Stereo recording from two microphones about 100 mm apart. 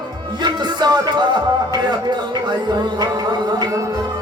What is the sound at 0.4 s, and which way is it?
Music, 45° right (ahead or behind).